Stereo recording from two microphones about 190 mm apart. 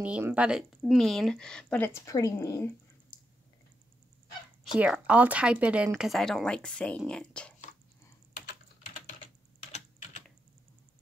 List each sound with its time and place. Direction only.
0.0 s speech: 5° right (ahead or behind)
2.0 s speech: 15° left (ahead or behind)
4.7 s speech: 5° right (ahead or behind)